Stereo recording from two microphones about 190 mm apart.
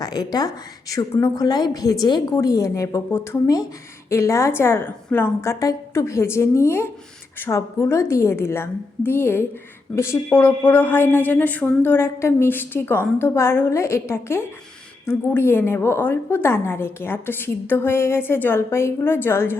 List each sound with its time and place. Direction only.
0.0 s a woman's voice: 20° left (ahead or behind)